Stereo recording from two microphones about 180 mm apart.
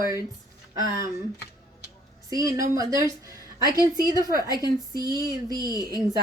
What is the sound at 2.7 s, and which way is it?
Speech, 20° right (ahead or behind).